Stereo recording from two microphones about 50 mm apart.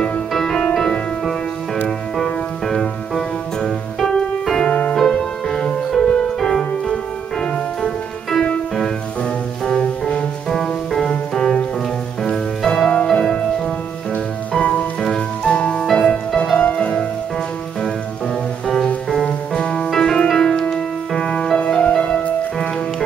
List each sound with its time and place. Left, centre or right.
0.3 s music: centre
2.1 s music: centre
4.6 s music: left
4.9 s music: centre
9.7 s music: centre
10.5 s music: centre
11.1 s music: centre
19.2 s music: centre